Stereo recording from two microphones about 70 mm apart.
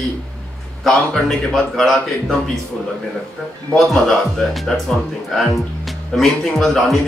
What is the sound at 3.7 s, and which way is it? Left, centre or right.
A man's voice, centre.